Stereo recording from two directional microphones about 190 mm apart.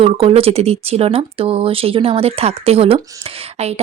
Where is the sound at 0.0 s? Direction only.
30° right (ahead or behind).